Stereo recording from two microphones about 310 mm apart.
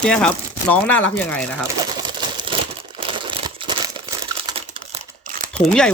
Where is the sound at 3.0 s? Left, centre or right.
Centre.